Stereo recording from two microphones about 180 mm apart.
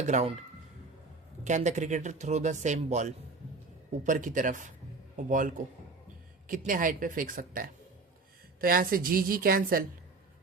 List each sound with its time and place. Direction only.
0.1 s speech: 40° right (ahead or behind)
1.5 s speech: 40° right (ahead or behind)